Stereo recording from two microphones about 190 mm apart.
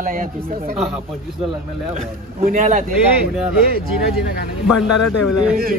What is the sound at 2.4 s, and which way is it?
Speech, 45° right (ahead or behind).